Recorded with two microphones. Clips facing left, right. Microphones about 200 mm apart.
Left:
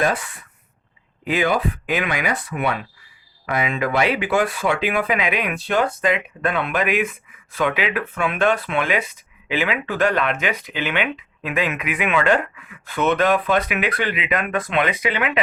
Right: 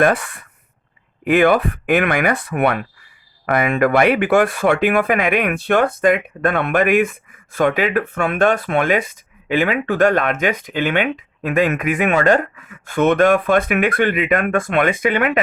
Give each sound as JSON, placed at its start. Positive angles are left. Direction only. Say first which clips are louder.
{"t": 0.0, "sound": "speech", "louder": "right 6 dB", "side_deg": -55}